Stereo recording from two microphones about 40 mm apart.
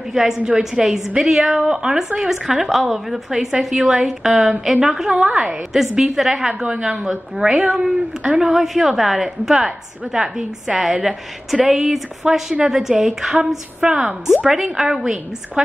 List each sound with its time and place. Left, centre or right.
0.1 s a woman's voice: centre
5.1 s a woman's voice: right
5.4 s a woman's voice: centre
6.6 s a woman's voice: right
8.5 s a woman's voice: centre
13.7 s a woman's voice: right
14.4 s a woman's voice: centre
15.6 s a woman's voice: right